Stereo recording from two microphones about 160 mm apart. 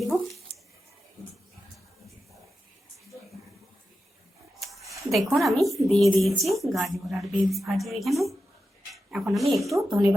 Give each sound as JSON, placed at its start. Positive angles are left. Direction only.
{"t": 5.1, "sound": "a woman's voice", "side_deg": 0}
{"t": 9.9, "sound": "speech", "side_deg": -20}